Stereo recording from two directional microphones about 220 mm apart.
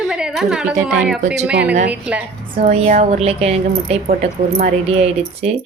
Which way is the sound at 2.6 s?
35° right (ahead or behind).